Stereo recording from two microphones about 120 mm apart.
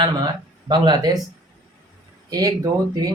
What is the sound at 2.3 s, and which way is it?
Speech, 35° right (ahead or behind).